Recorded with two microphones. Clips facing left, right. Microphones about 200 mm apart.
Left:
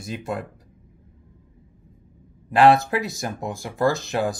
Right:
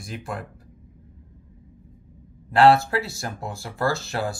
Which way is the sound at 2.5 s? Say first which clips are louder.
Left 1 dB; 15° left (ahead or behind).